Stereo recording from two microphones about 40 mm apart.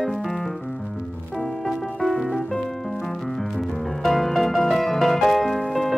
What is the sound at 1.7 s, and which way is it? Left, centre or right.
Music, centre.